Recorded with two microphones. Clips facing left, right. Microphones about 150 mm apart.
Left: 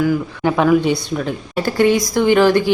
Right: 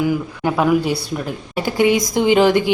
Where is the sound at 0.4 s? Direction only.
5° right (ahead or behind).